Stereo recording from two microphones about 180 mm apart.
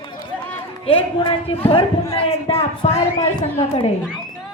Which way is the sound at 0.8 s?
30° left (ahead or behind).